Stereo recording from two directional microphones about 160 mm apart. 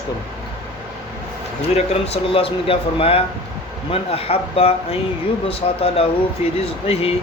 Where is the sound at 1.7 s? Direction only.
40° left (ahead or behind).